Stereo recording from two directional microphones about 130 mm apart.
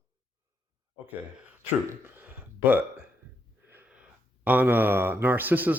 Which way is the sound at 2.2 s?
15° right (ahead or behind).